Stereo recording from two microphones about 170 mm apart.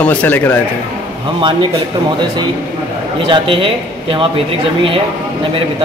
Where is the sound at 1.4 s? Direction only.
30° right (ahead or behind).